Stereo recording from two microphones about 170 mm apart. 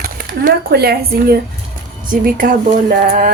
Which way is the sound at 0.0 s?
60° right (ahead or behind).